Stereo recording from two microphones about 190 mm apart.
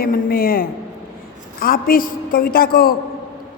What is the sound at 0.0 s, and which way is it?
A man's voice, 50° left (ahead or behind).